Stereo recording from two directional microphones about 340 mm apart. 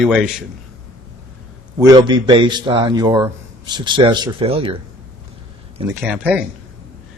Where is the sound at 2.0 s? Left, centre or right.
Centre.